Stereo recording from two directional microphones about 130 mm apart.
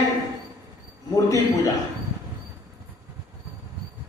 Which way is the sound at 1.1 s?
30° left (ahead or behind).